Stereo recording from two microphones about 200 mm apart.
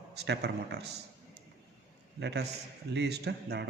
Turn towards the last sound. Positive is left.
turn(degrees=-55)  # may be behind; listen again after turning